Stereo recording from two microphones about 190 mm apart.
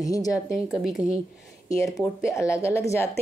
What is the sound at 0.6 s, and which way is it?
Speech, centre (ahead or behind).